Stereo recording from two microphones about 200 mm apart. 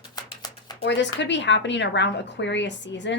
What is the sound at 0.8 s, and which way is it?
Speech, 60° left (ahead or behind).